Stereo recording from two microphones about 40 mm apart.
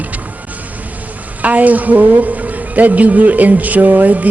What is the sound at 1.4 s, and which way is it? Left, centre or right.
Speech, right.